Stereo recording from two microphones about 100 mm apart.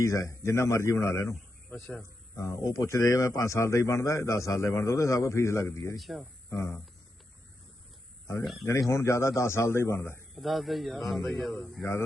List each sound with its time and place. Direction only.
0.0 s speech: 30° left (ahead or behind)
6.0 s speech: centre (ahead or behind)
8.6 s speech: 30° left (ahead or behind)
10.3 s speech: centre (ahead or behind)
11.8 s speech: 25° left (ahead or behind)